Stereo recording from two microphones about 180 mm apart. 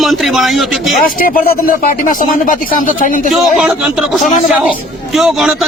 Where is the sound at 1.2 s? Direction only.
50° left (ahead or behind).